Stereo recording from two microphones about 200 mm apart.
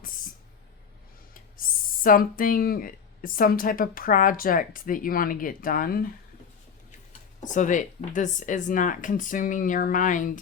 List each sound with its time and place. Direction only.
1.3 s speech: 45° left (ahead or behind)
7.4 s speech: 40° left (ahead or behind)